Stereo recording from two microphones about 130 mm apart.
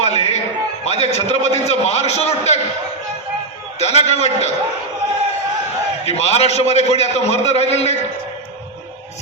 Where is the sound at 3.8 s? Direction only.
55° left (ahead or behind).